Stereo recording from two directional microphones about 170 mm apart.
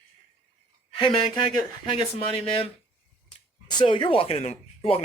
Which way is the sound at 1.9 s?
30° left (ahead or behind).